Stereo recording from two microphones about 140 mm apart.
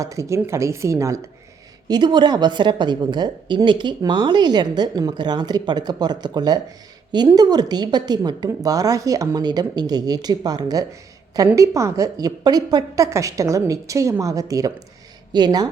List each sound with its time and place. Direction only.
0.0 s a woman's voice: 20° right (ahead or behind)
1.9 s a woman's voice: 35° right (ahead or behind)